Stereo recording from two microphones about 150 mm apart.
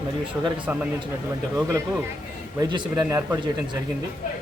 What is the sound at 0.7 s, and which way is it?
Speech, 10° right (ahead or behind).